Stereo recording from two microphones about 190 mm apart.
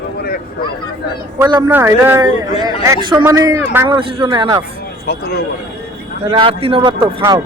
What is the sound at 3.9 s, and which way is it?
Speech, 25° right (ahead or behind).